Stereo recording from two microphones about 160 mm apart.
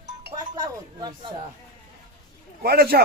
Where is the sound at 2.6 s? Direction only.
75° right (ahead or behind).